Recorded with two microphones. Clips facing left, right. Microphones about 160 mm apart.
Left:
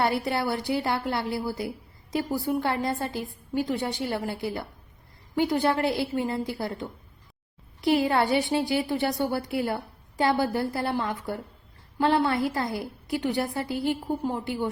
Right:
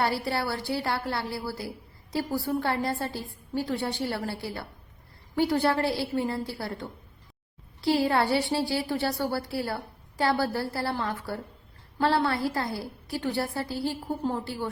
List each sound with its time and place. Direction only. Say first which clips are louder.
0.0 s a woman's voice: left 2 dB; 20° left (ahead or behind)